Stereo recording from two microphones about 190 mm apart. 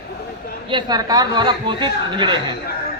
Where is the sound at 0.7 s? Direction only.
25° right (ahead or behind).